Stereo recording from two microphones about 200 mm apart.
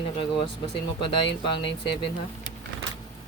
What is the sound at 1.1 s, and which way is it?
Speech, 25° left (ahead or behind).